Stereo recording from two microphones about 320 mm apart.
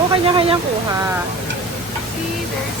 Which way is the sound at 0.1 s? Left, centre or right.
Centre.